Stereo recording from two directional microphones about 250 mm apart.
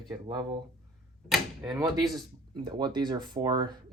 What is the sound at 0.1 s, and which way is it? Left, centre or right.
Speech, centre.